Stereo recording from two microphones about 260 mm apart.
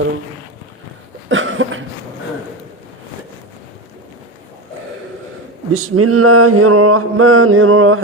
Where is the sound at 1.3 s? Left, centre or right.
Right.